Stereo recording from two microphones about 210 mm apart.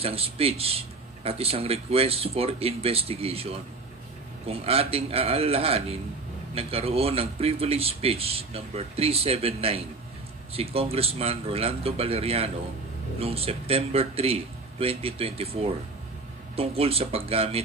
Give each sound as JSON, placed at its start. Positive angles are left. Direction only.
{"t": 0.0, "sound": "speech", "side_deg": -30}